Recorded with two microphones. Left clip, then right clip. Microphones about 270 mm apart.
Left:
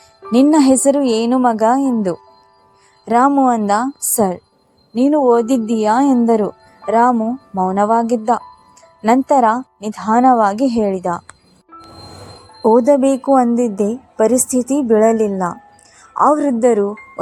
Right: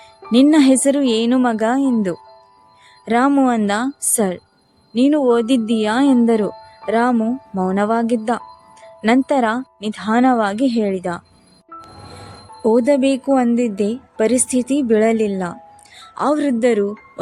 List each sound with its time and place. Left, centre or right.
0.3 s speech: centre
1.0 s a woman's voice: right
1.3 s a woman's voice: centre
12.8 s a woman's voice: centre